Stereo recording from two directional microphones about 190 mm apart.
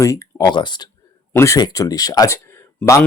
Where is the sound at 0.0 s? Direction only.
15° left (ahead or behind).